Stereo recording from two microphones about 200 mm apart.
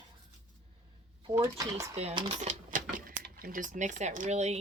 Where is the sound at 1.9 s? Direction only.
30° right (ahead or behind).